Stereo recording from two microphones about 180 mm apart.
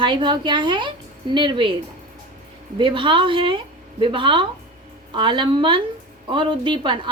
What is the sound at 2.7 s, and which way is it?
A woman's voice, 30° right (ahead or behind).